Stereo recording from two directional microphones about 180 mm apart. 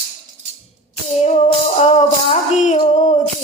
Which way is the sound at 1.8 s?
35° left (ahead or behind).